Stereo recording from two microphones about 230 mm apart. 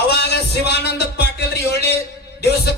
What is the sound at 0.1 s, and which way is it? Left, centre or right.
Music, left.